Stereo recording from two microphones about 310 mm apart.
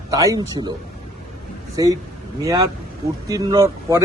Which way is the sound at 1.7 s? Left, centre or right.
Centre.